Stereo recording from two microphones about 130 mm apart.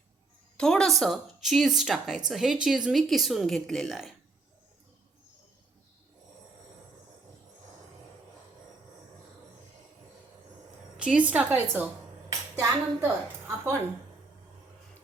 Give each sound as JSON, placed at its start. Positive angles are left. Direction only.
{"t": 0.5, "sound": "a woman's voice", "side_deg": 5}
{"t": 10.9, "sound": "a woman's voice", "side_deg": -5}